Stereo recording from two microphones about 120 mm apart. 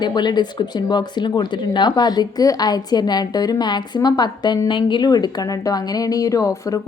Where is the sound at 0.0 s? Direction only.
35° left (ahead or behind).